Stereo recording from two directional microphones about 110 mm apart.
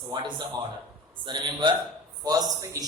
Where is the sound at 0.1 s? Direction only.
40° right (ahead or behind).